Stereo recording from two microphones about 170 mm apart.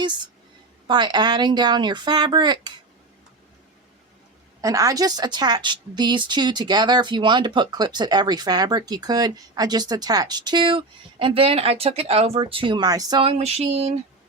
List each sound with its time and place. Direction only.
0.9 s a woman's voice: 25° right (ahead or behind)
4.6 s a woman's voice: 20° right (ahead or behind)
13.2 s a sound: 40° right (ahead or behind)